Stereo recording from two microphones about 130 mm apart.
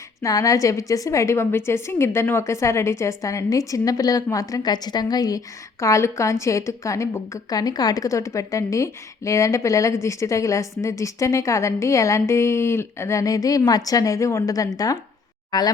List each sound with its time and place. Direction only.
0.2 s a woman's voice: 25° left (ahead or behind)